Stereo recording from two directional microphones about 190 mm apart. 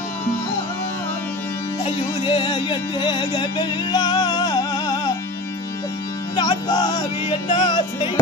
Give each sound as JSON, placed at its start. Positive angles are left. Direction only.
{"t": 1.9, "sound": "music", "side_deg": 25}
{"t": 6.3, "sound": "music", "side_deg": 20}